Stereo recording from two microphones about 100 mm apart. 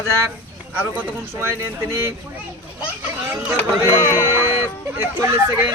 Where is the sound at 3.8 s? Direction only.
25° right (ahead or behind).